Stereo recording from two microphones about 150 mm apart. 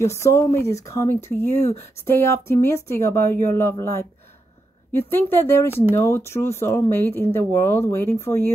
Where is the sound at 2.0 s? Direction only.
15° left (ahead or behind).